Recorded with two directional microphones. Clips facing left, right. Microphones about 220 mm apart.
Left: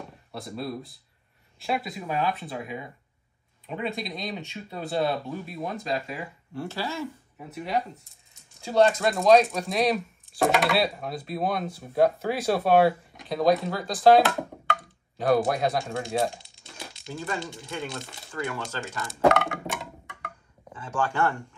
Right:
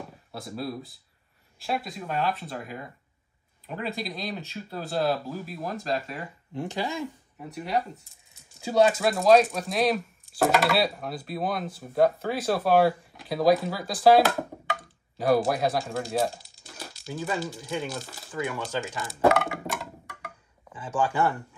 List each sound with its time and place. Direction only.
0.0 s speech: centre (ahead or behind)
6.5 s speech: 15° right (ahead or behind)
7.3 s speech: centre (ahead or behind)
16.4 s crumpling: centre (ahead or behind)
17.1 s speech: 5° right (ahead or behind)